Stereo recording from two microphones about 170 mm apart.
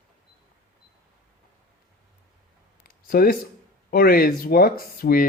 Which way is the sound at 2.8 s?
60° left (ahead or behind).